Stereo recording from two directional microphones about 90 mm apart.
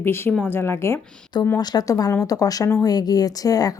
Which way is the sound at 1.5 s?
50° left (ahead or behind).